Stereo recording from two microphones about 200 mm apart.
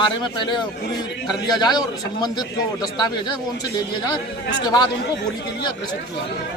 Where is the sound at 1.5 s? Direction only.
20° left (ahead or behind).